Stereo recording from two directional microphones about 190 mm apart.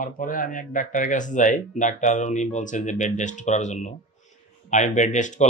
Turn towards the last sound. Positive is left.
turn(degrees=40)  # may be behind; listen again after turning